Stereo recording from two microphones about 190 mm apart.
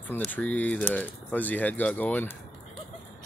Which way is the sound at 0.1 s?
5° left (ahead or behind).